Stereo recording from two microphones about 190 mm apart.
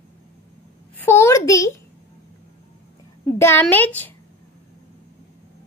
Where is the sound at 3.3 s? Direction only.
10° left (ahead or behind).